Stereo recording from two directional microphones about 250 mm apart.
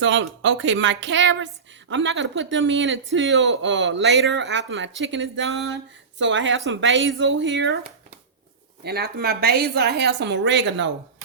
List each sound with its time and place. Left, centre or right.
0.0 s speech: right
8.8 s a woman's voice: right